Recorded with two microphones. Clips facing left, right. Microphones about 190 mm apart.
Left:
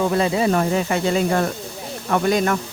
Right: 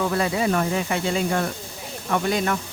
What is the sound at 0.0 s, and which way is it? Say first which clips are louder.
Speech: left 4 dB; 25° left (ahead or behind).